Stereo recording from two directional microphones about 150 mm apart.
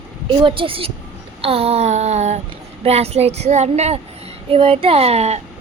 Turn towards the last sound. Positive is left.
turn(degrees=-45)  # may be behind; listen again after turning